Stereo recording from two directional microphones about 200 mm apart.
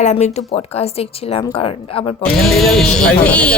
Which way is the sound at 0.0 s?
35° left (ahead or behind).